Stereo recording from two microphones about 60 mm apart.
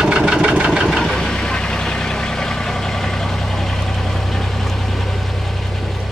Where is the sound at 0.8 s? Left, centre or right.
Centre.